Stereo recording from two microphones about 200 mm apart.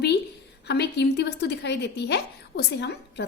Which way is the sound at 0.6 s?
55° left (ahead or behind).